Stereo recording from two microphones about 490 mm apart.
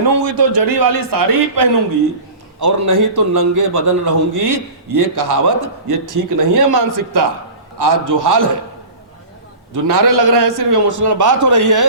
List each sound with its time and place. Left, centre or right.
0.3 s a man's voice: right
9.7 s a man's voice: right